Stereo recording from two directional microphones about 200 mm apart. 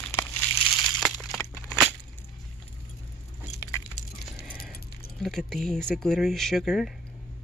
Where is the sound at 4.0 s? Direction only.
35° left (ahead or behind).